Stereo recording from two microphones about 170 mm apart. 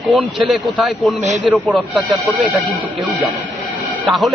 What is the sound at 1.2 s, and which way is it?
Speech, 40° right (ahead or behind).